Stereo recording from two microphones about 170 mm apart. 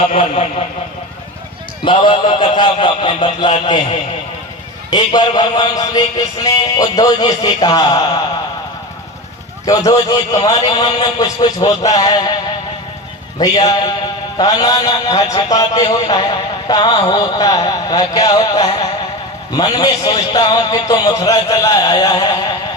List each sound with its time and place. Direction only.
0.1 s speech: 35° left (ahead or behind)
1.8 s a man's voice: 30° left (ahead or behind)
4.9 s a man's voice: 25° left (ahead or behind)
9.6 s a man's voice: 20° left (ahead or behind)
13.4 s a man's voice: 20° left (ahead or behind)